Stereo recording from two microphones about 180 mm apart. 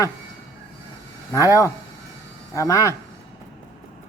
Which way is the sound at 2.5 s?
15° left (ahead or behind).